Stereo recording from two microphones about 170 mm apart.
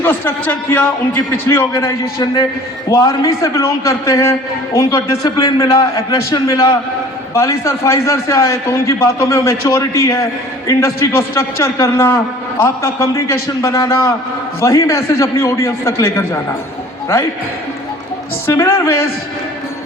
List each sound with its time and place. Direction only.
0.0 s a man's voice: 10° left (ahead or behind)
18.4 s a man's voice: 15° left (ahead or behind)